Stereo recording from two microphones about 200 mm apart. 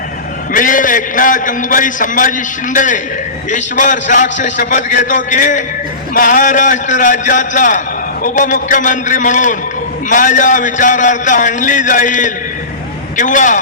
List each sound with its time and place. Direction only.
0.5 s a man's voice: 40° left (ahead or behind)